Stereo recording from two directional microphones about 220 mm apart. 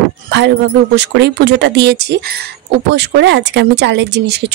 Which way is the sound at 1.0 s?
50° right (ahead or behind).